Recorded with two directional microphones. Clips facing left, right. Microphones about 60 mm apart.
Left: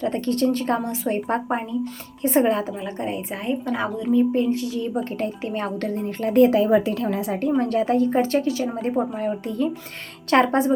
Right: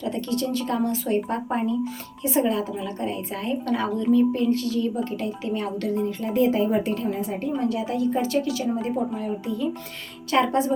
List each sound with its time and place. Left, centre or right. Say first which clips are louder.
0.0 s a woman's voice: left 5 dB; left
3.4 s speech: even; centre
5.1 s a woman's voice: left 1 dB; left
6.0 s a woman's voice: left 7 dB; left
7.6 s a woman's voice: left 3 dB; left
9.1 s speech: left 3 dB; left